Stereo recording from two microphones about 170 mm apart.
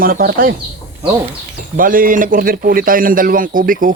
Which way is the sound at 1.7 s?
55° right (ahead or behind).